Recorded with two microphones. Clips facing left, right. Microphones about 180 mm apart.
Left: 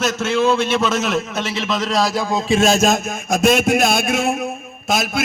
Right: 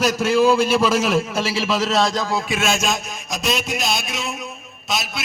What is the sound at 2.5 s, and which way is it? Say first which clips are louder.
A man's voice: left 10 dB; 35° left (ahead or behind).